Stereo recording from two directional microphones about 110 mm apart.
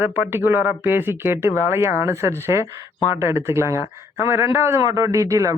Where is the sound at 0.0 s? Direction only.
20° right (ahead or behind).